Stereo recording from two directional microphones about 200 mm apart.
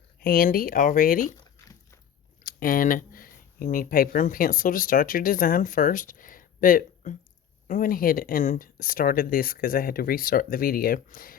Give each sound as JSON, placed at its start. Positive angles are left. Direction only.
{"t": 0.2, "sound": "speech", "side_deg": 45}
{"t": 2.4, "sound": "speech", "side_deg": 45}